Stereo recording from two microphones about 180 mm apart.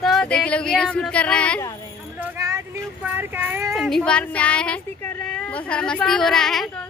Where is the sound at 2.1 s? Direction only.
15° right (ahead or behind).